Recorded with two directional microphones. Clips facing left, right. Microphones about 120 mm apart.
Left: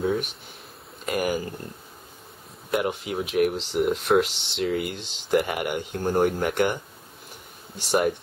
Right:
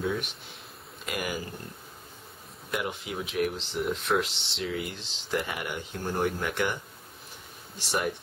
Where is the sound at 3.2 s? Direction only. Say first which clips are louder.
Left 7 dB; 60° left (ahead or behind).